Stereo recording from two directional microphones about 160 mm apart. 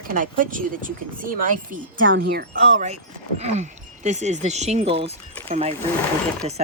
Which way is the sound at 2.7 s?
45° right (ahead or behind).